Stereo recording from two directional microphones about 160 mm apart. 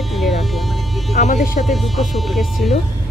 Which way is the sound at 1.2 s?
65° left (ahead or behind).